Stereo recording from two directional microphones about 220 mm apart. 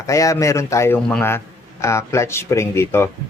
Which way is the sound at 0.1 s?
15° left (ahead or behind).